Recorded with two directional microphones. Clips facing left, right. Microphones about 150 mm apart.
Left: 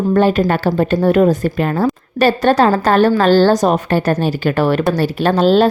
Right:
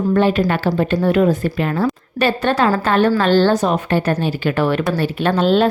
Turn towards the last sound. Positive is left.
turn(degrees=35)  # may be behind; listen again after turning